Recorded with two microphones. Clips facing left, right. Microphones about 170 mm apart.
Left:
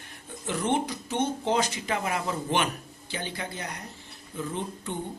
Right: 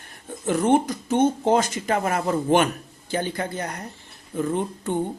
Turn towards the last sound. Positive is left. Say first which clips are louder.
# right 8 dB
turn(degrees=-50)  # may be behind; listen again after turning